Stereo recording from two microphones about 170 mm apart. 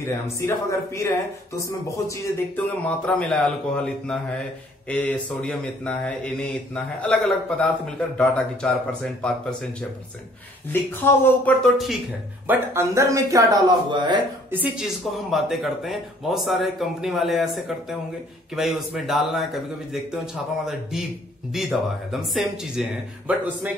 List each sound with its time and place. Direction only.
0.4 s speech: 15° left (ahead or behind); by 12.0 s centre (ahead or behind)
12.4 s speech: 15° right (ahead or behind)
14.5 s speech: 10° right (ahead or behind)
21.5 s speech: centre (ahead or behind)